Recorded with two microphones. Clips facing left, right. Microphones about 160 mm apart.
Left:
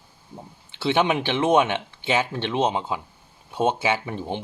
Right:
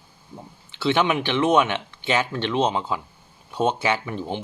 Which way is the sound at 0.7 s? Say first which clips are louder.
Even; 25° left (ahead or behind).